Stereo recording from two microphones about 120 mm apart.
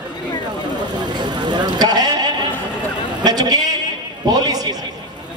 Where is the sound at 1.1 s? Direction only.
40° right (ahead or behind).